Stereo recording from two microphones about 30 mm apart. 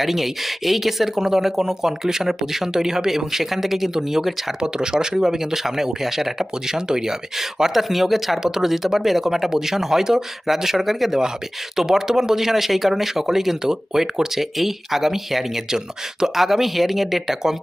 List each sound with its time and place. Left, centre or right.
0.0 s speech: centre
4.6 s speech: right; by 8.4 s centre
8.4 s speech: centre
11.9 s speech: centre